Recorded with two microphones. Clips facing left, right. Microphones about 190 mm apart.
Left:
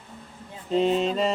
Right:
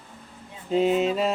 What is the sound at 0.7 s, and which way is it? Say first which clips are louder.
Speech: right 1 dB; 5° right (ahead or behind).